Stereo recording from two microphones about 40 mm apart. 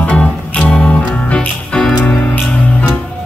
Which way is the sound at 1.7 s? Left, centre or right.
Centre.